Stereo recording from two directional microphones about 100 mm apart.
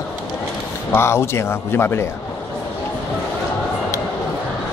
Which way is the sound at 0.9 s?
25° left (ahead or behind).